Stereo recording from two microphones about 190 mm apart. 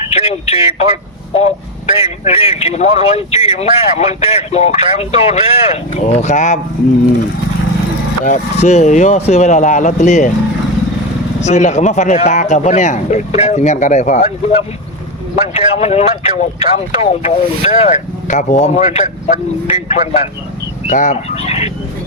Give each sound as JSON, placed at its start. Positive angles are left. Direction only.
{"t": 0.1, "sound": "speech", "side_deg": 35}
{"t": 8.2, "sound": "speech", "side_deg": 40}
{"t": 11.3, "sound": "speech", "side_deg": 40}